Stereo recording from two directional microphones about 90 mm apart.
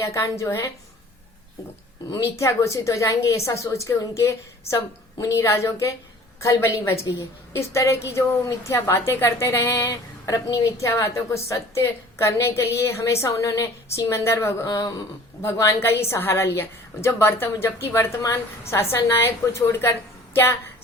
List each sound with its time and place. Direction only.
0.0 s a woman's voice: 35° left (ahead or behind)
2.0 s speech: 45° left (ahead or behind)
2.4 s a woman's voice: 35° left (ahead or behind)
14.7 s speech: 45° left (ahead or behind)
15.5 s a woman's voice: 30° left (ahead or behind)